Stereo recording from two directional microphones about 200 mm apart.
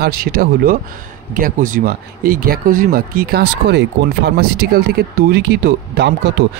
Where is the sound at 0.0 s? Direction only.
50° right (ahead or behind).